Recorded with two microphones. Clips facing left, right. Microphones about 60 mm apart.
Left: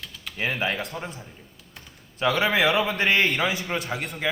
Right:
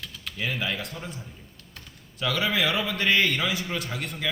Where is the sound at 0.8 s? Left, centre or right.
Left.